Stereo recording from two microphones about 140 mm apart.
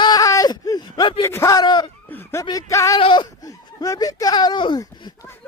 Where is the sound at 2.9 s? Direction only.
35° left (ahead or behind).